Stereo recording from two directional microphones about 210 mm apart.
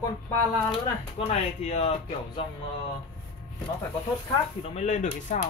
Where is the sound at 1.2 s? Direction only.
30° left (ahead or behind).